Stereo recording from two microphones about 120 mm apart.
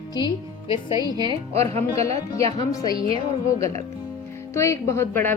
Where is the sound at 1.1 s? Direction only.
40° right (ahead or behind).